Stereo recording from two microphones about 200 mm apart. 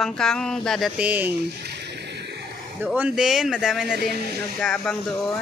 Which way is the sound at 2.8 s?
5° right (ahead or behind).